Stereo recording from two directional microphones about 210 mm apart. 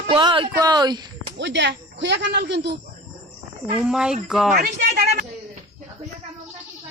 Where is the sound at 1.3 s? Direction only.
60° right (ahead or behind).